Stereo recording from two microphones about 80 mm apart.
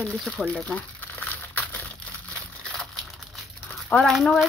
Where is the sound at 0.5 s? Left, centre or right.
Centre.